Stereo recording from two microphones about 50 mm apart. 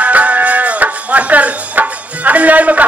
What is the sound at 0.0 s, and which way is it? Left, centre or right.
Music, right.